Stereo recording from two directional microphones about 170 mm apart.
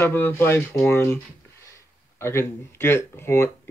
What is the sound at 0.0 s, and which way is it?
Speech, 10° left (ahead or behind).